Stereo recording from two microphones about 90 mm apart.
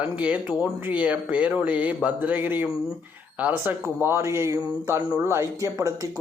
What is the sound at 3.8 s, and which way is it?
Speech, 30° right (ahead or behind).